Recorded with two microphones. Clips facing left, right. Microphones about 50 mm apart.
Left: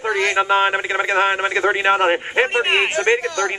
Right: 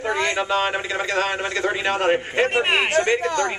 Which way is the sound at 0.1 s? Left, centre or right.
Left.